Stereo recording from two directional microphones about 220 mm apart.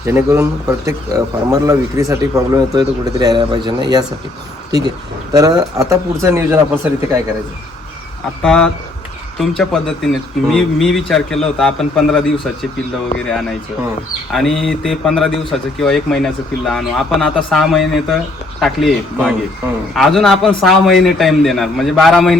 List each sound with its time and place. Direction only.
0.1 s speech: 10° right (ahead or behind)
1.6 s speech: 15° right (ahead or behind)
5.3 s speech: 15° right (ahead or behind)
8.4 s speech: 5° left (ahead or behind)